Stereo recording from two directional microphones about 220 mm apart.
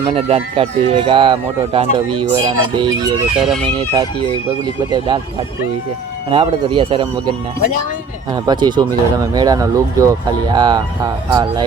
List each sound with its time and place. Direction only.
0.1 s speech: 25° right (ahead or behind)
3.3 s speech: centre (ahead or behind)
4.9 s speech: 20° right (ahead or behind)
6.3 s speech: 25° right (ahead or behind)